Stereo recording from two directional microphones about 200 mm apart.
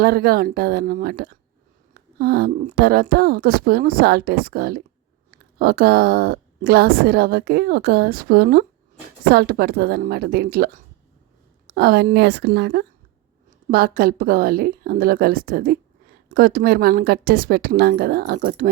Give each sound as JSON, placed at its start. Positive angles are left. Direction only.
{"t": 0.0, "sound": "a woman's voice", "side_deg": -50}